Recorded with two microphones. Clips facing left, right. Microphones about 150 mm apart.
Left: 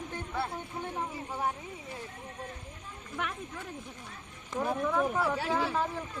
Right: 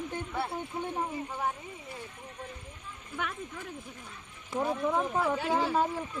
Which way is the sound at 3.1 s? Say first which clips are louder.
Even; 10° right (ahead or behind).